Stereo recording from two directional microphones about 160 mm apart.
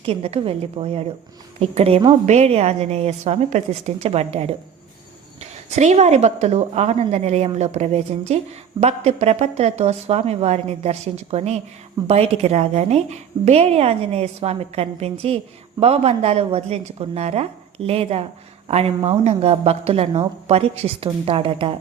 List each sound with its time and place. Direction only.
0.0 s a woman's voice: 35° right (ahead or behind)
5.7 s a woman's voice: 45° right (ahead or behind)